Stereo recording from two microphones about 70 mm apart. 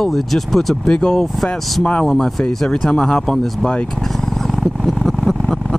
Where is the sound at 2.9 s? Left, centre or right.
Centre.